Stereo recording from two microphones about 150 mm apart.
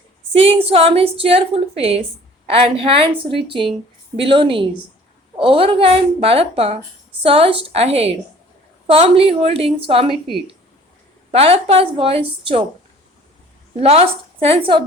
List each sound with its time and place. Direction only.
0.3 s a woman's voice: 40° right (ahead or behind)
11.3 s a woman's voice: 40° right (ahead or behind)
13.7 s a woman's voice: 40° right (ahead or behind)